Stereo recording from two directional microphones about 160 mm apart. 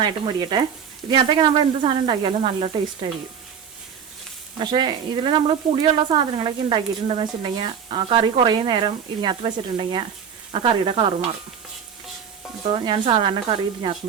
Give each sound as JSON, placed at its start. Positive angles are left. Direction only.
{"t": 0.0, "sound": "speech", "side_deg": -30}
{"t": 4.6, "sound": "speech", "side_deg": -30}
{"t": 12.7, "sound": "speech", "side_deg": -30}